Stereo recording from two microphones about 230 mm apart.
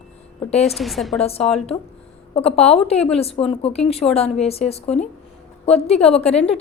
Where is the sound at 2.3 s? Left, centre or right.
Left.